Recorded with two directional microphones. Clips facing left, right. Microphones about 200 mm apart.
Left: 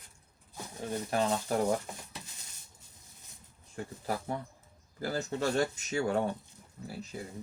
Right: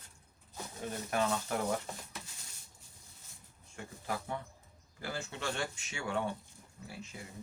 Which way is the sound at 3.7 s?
35° left (ahead or behind).